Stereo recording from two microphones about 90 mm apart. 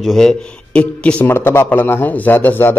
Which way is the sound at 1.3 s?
25° left (ahead or behind).